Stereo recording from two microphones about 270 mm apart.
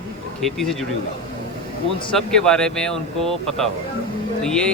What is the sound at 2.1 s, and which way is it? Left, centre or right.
Speech, centre.